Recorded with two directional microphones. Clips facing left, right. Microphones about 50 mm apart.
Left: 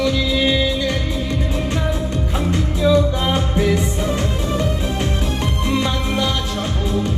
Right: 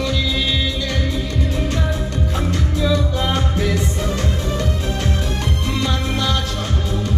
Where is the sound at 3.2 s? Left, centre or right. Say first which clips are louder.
Left 2 dB; centre.